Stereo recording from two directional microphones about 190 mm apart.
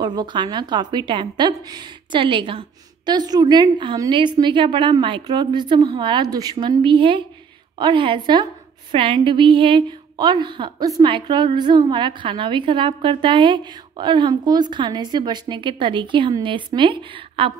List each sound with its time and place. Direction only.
0.0 s a woman's voice: 20° right (ahead or behind)